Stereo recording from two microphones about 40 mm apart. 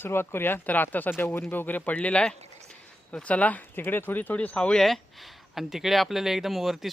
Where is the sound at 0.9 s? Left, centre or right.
Left.